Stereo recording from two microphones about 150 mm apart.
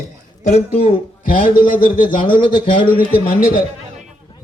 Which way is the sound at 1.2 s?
65° left (ahead or behind).